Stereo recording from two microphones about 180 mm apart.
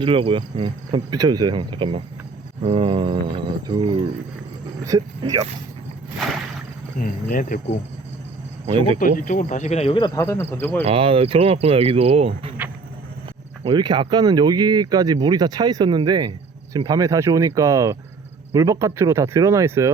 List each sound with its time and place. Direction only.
0.0 s speech: 30° right (ahead or behind)
4.8 s speech: 20° right (ahead or behind)
6.1 s a sound: centre (ahead or behind)
7.0 s speech: 50° left (ahead or behind)
8.6 s speech: 30° right (ahead or behind)
9.0 s speech: 50° left (ahead or behind); by 10.1 s 30° left (ahead or behind)
10.2 s speech: 15° left (ahead or behind)
10.8 s speech: 30° right (ahead or behind)
13.7 s speech: 25° right (ahead or behind)